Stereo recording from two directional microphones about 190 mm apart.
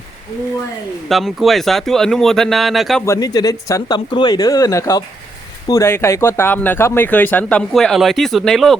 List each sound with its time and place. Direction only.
1.0 s speech: centre (ahead or behind)
3.1 s speech: 20° left (ahead or behind); by 8.7 s centre (ahead or behind)